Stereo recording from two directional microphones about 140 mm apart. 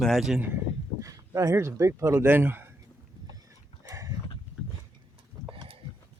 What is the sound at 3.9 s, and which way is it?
Clip-clop, 25° right (ahead or behind).